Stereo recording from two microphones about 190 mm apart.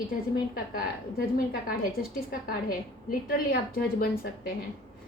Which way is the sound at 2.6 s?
50° left (ahead or behind).